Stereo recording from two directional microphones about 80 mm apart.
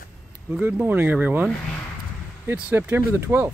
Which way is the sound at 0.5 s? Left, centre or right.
Centre.